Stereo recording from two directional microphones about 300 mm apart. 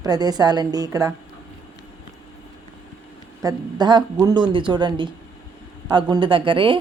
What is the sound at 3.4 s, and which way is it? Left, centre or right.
A woman's voice, centre.